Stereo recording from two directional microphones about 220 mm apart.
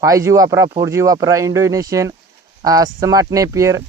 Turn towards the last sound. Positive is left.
turn(degrees=-15)  # may be behind; listen again after turning